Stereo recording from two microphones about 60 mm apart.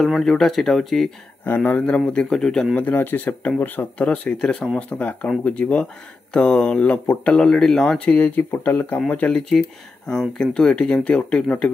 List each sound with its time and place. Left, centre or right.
0.2 s speech: centre
1.4 s speech: left; by 2.7 s centre
2.7 s speech: left
8.2 s speech: left
9.0 s speech: centre